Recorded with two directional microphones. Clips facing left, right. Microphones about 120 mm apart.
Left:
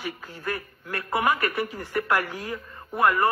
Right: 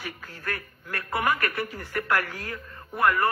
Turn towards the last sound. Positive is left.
turn(degrees=25)  # may be behind; listen again after turning